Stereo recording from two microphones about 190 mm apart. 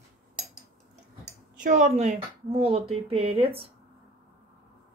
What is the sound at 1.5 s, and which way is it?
Speech, 45° right (ahead or behind).